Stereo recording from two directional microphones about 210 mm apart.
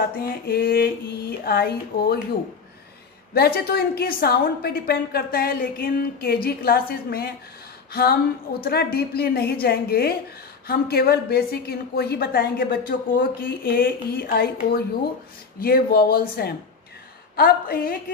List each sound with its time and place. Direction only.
0.5 s a woman's voice: 45° left (ahead or behind)
3.3 s a woman's voice: 45° left (ahead or behind)